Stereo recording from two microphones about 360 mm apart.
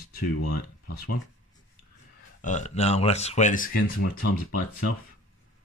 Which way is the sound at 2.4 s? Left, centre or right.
Centre.